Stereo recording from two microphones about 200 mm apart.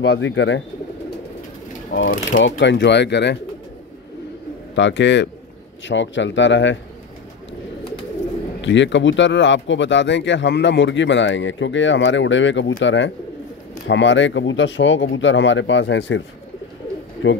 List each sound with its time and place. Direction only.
0.0 s speech: 65° left (ahead or behind)
2.0 s speech: 45° left (ahead or behind)
2.4 s speech: 60° left (ahead or behind)
4.7 s speech: 65° left (ahead or behind)
8.5 s speech: 65° left (ahead or behind)